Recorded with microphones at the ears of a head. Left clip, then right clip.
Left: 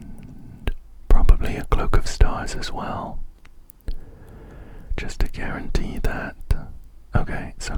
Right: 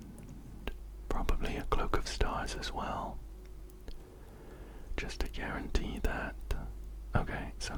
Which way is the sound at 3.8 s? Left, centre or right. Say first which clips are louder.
Left 10 dB; left.